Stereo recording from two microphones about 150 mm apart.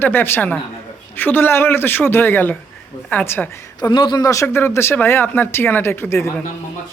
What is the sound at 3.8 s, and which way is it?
Speech, 30° left (ahead or behind).